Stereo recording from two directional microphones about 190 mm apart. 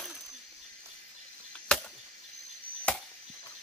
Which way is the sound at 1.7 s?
5° left (ahead or behind).